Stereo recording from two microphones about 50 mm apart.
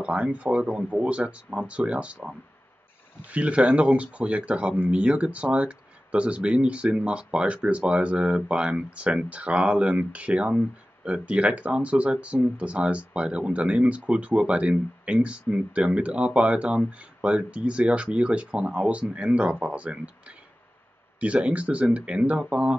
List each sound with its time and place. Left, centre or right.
0.0 s speech: right